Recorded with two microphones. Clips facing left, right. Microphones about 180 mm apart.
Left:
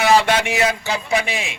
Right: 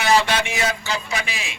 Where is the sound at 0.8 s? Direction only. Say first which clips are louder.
Left 5 dB; 55° left (ahead or behind).